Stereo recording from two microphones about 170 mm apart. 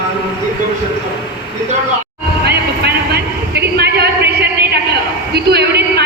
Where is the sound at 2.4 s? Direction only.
70° right (ahead or behind).